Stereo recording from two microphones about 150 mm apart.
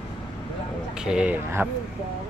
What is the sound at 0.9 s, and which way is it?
Speech, 5° right (ahead or behind).